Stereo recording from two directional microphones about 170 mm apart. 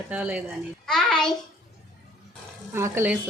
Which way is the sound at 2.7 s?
15° right (ahead or behind).